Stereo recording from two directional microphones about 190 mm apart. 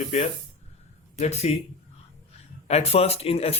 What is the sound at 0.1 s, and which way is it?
Speech, 35° left (ahead or behind).